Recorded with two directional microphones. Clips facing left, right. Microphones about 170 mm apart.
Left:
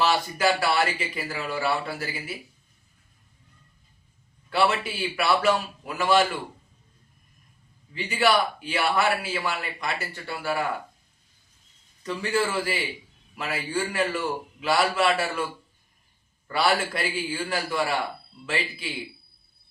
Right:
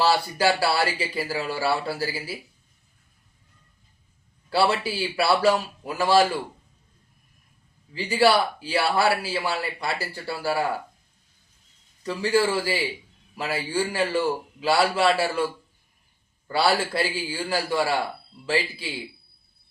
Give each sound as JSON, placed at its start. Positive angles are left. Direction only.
{"t": 0.0, "sound": "speech", "side_deg": -30}
{"t": 4.4, "sound": "speech", "side_deg": -35}
{"t": 7.9, "sound": "speech", "side_deg": -35}
{"t": 12.0, "sound": "a man's voice", "side_deg": -30}
{"t": 16.9, "sound": "a man's voice", "side_deg": -30}